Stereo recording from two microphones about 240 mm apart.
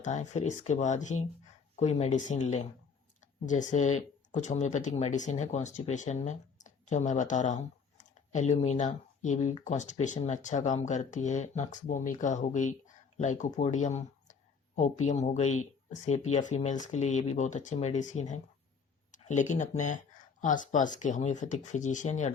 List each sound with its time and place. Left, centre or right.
0.0 s speech: left